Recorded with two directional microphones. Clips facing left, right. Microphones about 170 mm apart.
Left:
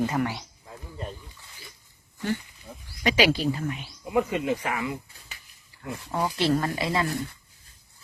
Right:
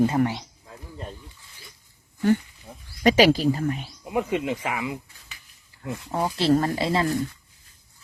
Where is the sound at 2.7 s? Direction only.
30° right (ahead or behind).